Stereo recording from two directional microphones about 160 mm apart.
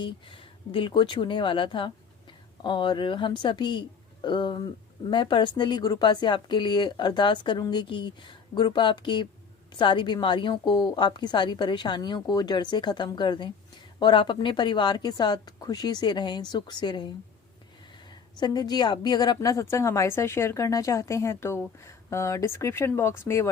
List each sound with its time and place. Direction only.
0.0 s a woman's voice: 30° left (ahead or behind)
18.3 s speech: 25° left (ahead or behind)